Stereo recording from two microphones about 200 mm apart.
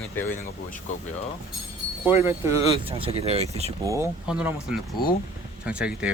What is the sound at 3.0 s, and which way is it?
Speech, 30° right (ahead or behind).